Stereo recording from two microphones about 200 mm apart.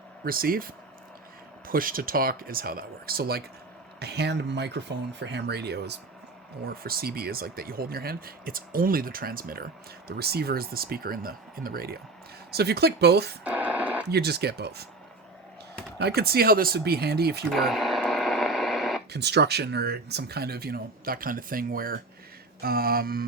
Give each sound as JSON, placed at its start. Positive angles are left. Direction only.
{"t": 0.3, "sound": "speech", "side_deg": -45}
{"t": 13.4, "sound": "radio", "side_deg": -5}
{"t": 14.1, "sound": "speech", "side_deg": -55}
{"t": 16.0, "sound": "speech", "side_deg": -55}
{"t": 17.5, "sound": "radio", "side_deg": 0}
{"t": 19.1, "sound": "speech", "side_deg": -55}